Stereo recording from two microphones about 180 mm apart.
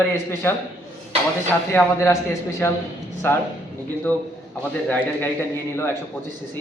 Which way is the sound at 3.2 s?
10° left (ahead or behind).